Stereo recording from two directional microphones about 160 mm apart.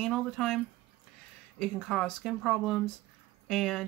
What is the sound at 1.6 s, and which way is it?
Speech, centre (ahead or behind).